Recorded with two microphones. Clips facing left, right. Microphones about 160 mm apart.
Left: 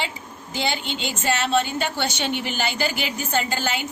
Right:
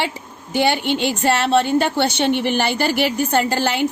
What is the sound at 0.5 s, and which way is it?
A woman's voice, 60° right (ahead or behind).